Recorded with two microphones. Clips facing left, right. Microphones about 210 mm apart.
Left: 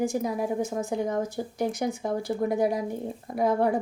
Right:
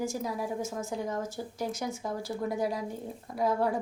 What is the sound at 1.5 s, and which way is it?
Speech, 60° left (ahead or behind).